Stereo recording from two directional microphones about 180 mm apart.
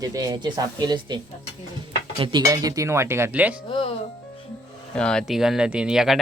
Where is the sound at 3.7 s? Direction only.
30° left (ahead or behind).